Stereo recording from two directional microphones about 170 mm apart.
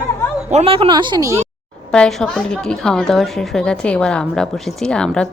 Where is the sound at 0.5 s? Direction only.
35° right (ahead or behind).